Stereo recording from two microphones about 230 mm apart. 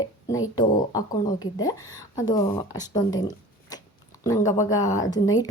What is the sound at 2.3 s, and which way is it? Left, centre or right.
A woman's voice, centre.